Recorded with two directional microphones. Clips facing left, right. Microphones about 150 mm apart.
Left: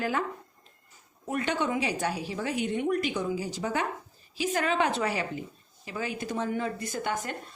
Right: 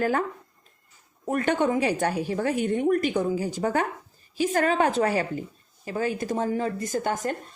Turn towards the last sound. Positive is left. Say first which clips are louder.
# right 5 dB
turn(degrees=-40)  # may be behind; listen again after turning